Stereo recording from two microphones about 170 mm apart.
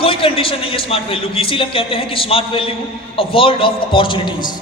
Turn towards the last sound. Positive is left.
turn(degrees=30)  # may be behind; listen again after turning